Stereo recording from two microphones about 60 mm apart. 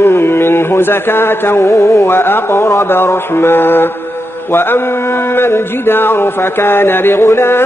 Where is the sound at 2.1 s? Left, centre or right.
Left.